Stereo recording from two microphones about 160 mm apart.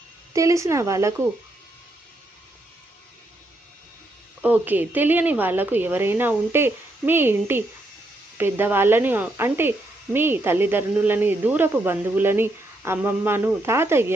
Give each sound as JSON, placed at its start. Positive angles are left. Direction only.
{"t": 0.3, "sound": "speech", "side_deg": -20}
{"t": 4.4, "sound": "a woman's voice", "side_deg": -10}